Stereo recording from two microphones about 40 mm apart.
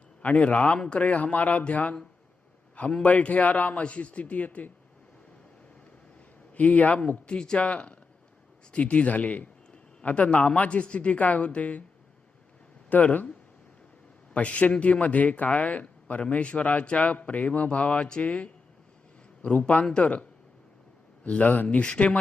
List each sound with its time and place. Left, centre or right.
0.2 s a man's voice: left
3.0 s a man's voice: left
6.5 s a man's voice: left
7.3 s a man's voice: left
12.9 s a man's voice: left
14.3 s a man's voice: left
21.2 s a man's voice: left
21.8 s speech: left